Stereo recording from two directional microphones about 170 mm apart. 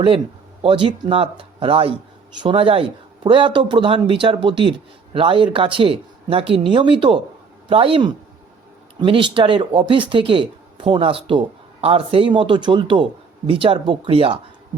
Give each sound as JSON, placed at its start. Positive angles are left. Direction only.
{"t": 0.6, "sound": "speech", "side_deg": -30}